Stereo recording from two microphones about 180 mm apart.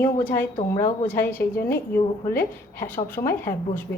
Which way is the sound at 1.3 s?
55° left (ahead or behind).